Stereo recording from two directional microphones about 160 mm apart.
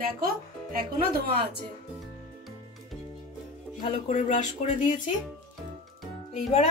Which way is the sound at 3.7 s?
45° left (ahead or behind).